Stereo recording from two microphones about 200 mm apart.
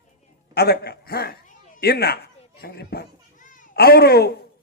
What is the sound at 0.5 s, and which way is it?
Speech, 55° left (ahead or behind).